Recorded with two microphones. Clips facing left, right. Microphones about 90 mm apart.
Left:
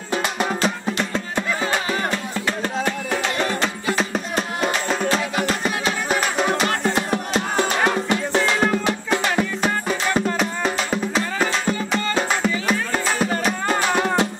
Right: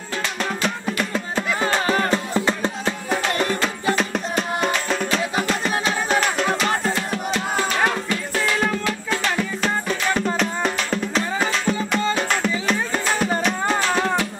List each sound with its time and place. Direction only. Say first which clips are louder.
0.1 s music: left 3 dB; 20° left (ahead or behind)
1.9 s music: right 3 dB; 35° right (ahead or behind)
3.9 s music: even; centre (ahead or behind)
6.8 s music: left 2 dB; 20° left (ahead or behind)